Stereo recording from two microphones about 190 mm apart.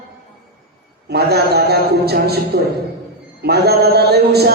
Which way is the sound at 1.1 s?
55° right (ahead or behind).